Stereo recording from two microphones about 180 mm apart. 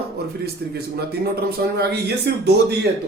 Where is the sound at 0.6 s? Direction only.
65° right (ahead or behind).